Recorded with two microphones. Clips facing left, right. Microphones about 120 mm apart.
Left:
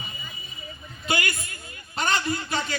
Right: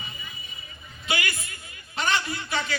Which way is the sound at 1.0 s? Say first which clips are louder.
Left 2 dB; 40° left (ahead or behind).